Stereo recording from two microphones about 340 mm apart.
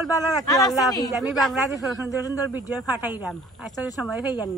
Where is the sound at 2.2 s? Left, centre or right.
Centre.